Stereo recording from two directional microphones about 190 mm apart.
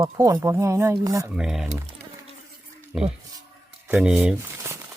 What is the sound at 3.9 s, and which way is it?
Speech, 5° right (ahead or behind).